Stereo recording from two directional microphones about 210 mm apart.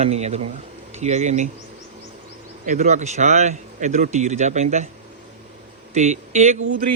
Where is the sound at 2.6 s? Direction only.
35° right (ahead or behind).